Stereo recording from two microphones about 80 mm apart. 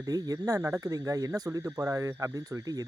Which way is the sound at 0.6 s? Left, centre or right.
Right.